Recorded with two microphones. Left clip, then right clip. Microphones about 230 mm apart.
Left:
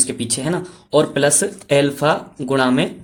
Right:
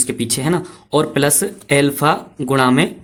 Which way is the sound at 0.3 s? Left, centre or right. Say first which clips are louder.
Right 3 dB; right.